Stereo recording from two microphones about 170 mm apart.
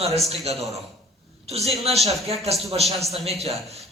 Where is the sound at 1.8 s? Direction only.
40° right (ahead or behind).